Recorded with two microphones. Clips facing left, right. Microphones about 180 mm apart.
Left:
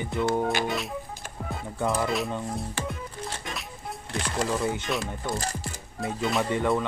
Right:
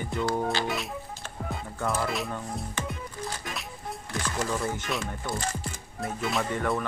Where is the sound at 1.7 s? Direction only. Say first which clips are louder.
Left 3 dB; 15° left (ahead or behind).